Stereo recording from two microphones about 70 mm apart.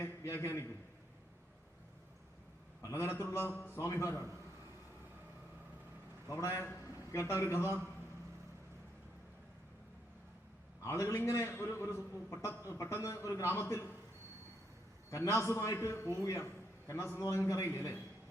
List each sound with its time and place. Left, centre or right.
0.0 s a man's voice: left
2.8 s a man's voice: left
6.3 s a man's voice: left
10.8 s a man's voice: left
15.1 s a man's voice: left